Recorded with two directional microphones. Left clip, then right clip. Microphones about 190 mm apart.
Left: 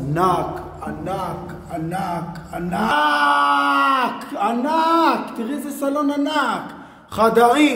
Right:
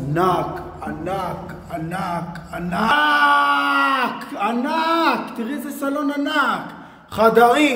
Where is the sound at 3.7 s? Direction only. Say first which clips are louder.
Left 1 dB; 25° left (ahead or behind).